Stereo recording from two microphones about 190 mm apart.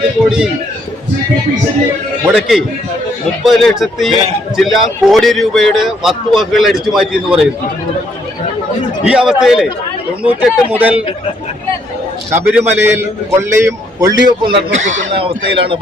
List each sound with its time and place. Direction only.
2.2 s a man's voice: 5° right (ahead or behind)
9.0 s a man's voice: 5° right (ahead or behind)
12.3 s a man's voice: 10° right (ahead or behind)
14.7 s speech: 40° right (ahead or behind)
15.1 s speech: 30° right (ahead or behind)